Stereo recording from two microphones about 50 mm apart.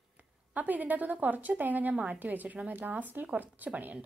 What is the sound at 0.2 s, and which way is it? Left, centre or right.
A woman's voice, right.